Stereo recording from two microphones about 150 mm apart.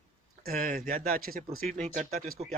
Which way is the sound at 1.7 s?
60° right (ahead or behind).